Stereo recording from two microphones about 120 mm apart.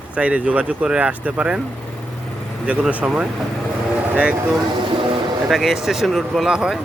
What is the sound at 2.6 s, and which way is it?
Speech, 10° right (ahead or behind).